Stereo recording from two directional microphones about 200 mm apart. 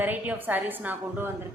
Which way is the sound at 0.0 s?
10° right (ahead or behind).